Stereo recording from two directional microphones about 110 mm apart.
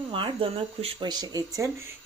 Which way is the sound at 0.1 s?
55° right (ahead or behind).